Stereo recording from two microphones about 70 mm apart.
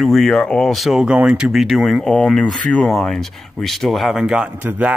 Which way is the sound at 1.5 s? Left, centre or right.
Centre.